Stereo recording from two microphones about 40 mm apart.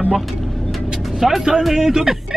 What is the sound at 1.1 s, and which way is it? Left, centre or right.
A man's voice, centre.